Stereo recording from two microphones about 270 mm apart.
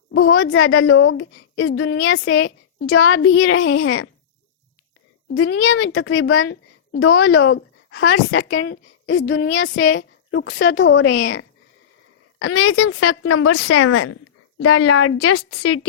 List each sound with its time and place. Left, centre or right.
0.1 s a woman's voice: left
5.3 s a woman's voice: left